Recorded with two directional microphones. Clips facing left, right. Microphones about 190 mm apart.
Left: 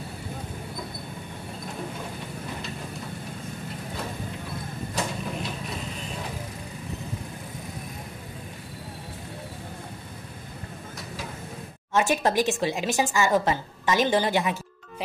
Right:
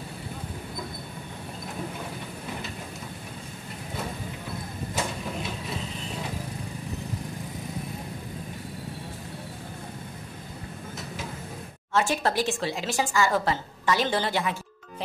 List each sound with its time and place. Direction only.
11.9 s a woman's voice: 15° left (ahead or behind)